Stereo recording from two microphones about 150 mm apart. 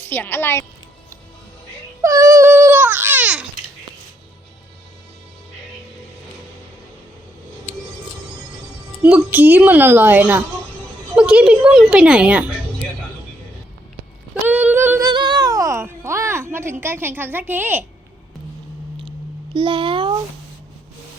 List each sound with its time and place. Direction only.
0.0 s a woman's voice: 15° left (ahead or behind)
2.0 s baby cry: 20° right (ahead or behind)
9.0 s a woman's voice: 10° right (ahead or behind)
14.4 s female singing: 10° right (ahead or behind)
15.1 s a sound: 30° right (ahead or behind); by 17.8 s 10° right (ahead or behind)
19.5 s a child's voice: 35° right (ahead or behind)